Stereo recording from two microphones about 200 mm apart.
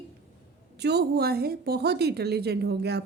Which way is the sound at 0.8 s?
55° right (ahead or behind).